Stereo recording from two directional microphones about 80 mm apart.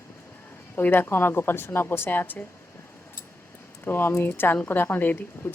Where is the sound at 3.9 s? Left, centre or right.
Left.